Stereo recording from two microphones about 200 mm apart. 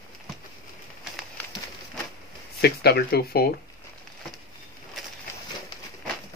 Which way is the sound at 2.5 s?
55° left (ahead or behind).